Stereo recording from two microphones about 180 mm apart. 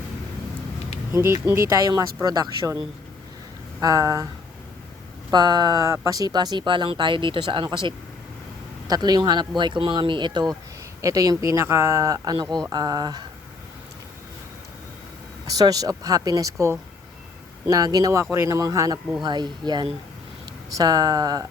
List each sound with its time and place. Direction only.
1.1 s speech: 15° right (ahead or behind)
5.3 s speech: 25° right (ahead or behind)
15.4 s speech: 20° right (ahead or behind)